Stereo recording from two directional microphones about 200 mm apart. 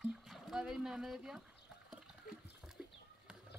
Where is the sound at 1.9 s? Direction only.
Centre (ahead or behind).